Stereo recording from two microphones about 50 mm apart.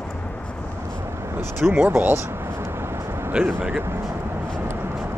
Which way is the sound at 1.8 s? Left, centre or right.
Right.